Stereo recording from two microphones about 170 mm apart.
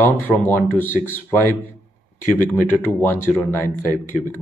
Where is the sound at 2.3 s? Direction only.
10° left (ahead or behind).